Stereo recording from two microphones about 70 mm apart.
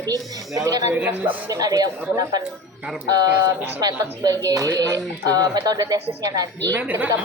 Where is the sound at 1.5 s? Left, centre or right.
Right.